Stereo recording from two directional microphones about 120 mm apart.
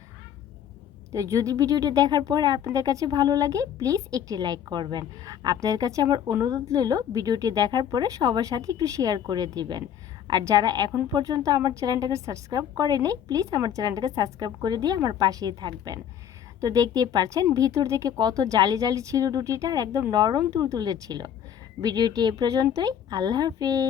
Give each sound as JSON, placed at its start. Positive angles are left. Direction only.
{"t": 1.1, "sound": "a woman's voice", "side_deg": -25}